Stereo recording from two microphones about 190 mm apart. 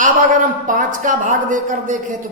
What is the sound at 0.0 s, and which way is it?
A man's voice, 45° right (ahead or behind).